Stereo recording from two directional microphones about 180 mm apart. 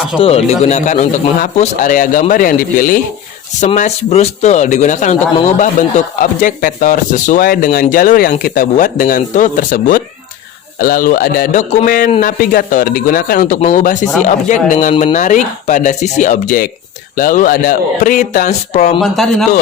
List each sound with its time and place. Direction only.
0.2 s a man's voice: 35° left (ahead or behind); by 3.0 s 50° left (ahead or behind)
3.6 s a man's voice: 40° left (ahead or behind)
13.6 s speech: 40° left (ahead or behind)
18.9 s speech: centre (ahead or behind)